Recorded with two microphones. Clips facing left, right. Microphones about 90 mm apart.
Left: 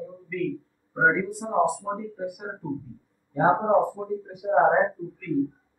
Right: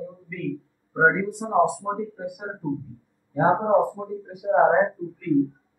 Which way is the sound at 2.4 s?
5° right (ahead or behind).